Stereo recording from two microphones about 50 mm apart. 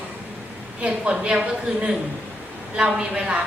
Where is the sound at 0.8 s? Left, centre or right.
Centre.